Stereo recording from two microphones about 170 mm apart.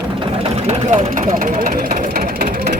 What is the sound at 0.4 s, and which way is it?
Vehicle, 35° right (ahead or behind).